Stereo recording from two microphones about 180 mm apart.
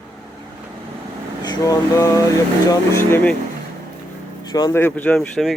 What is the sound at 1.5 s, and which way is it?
Speech, 20° left (ahead or behind).